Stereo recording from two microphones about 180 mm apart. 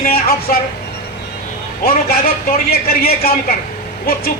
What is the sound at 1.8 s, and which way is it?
A woman's voice, 55° left (ahead or behind).